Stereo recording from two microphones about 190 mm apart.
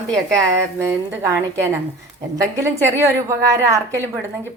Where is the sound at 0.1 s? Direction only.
15° right (ahead or behind).